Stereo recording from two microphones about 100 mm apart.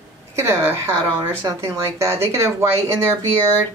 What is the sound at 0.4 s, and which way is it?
Speech, 25° right (ahead or behind).